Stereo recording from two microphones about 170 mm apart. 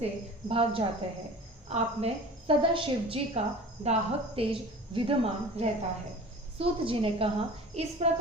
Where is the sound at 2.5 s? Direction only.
30° right (ahead or behind).